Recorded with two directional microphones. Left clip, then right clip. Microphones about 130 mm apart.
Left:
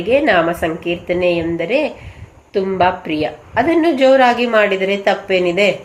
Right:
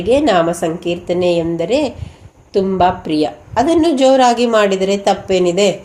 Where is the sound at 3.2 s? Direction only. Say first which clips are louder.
Right 1 dB; 45° right (ahead or behind).